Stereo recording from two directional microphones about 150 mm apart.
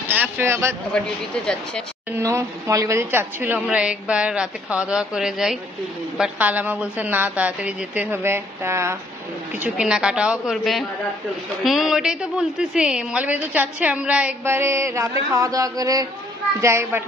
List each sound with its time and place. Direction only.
0.1 s a woman's voice: 15° right (ahead or behind)
0.9 s a woman's voice: 5° left (ahead or behind)
2.1 s a woman's voice: 15° right (ahead or behind)
9.6 s a woman's voice: 5° right (ahead or behind)